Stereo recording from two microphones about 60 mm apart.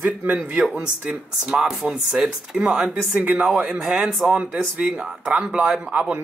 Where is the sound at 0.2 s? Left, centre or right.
Right.